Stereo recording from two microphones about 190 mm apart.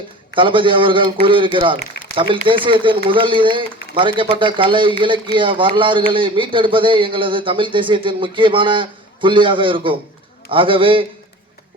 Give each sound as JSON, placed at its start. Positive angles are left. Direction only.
{"t": 0.3, "sound": "a man's voice", "side_deg": -25}